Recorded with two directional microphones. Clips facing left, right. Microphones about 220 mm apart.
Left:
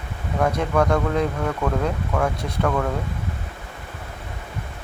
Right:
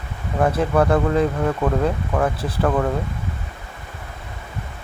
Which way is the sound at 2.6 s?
15° right (ahead or behind).